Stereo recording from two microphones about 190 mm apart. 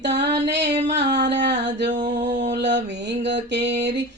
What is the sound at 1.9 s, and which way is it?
Mantra, 40° right (ahead or behind).